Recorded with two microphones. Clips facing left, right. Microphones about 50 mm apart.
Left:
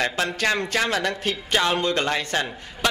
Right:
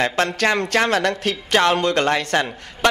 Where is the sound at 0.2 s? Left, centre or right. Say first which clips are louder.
Right 4 dB; right.